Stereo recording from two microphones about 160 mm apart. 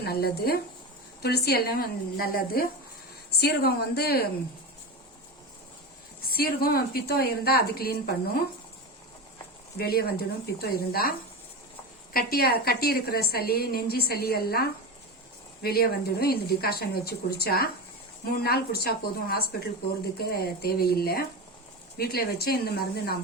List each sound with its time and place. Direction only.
0.0 s a woman's voice: 80° left
3.3 s speech: 90° left
6.2 s a woman's voice: 70° left (ahead or behind)
9.7 s a woman's voice: 75° left (ahead or behind)
12.1 s a woman's voice: 70° left (ahead or behind)